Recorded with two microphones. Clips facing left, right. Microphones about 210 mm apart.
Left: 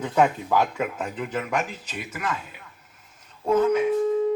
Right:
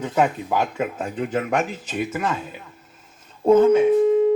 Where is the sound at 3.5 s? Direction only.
25° right (ahead or behind).